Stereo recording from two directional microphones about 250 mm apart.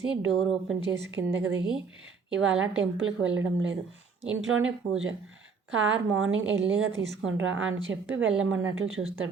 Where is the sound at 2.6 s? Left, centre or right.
Right.